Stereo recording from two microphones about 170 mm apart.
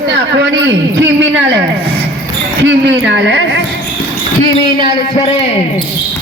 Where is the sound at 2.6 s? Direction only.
90° right.